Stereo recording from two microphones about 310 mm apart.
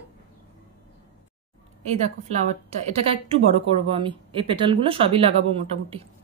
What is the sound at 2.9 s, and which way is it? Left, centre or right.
A woman's voice, centre.